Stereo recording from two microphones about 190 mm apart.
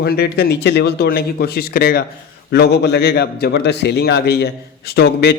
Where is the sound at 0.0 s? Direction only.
55° left (ahead or behind).